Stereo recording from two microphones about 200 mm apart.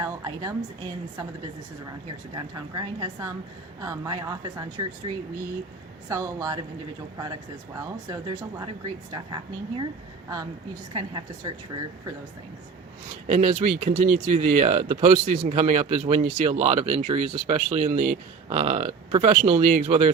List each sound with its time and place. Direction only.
0.0 s a woman's voice: 15° right (ahead or behind)
2.3 s speech: 20° right (ahead or behind)
7.8 s speech: 20° right (ahead or behind)
10.9 s speech: 20° right (ahead or behind)
13.2 s speech: 35° right (ahead or behind)